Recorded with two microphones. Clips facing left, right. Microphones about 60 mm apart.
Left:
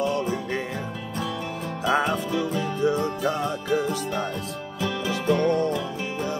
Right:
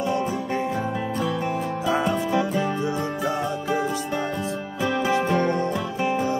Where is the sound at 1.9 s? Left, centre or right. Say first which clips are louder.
Left 1 dB; left.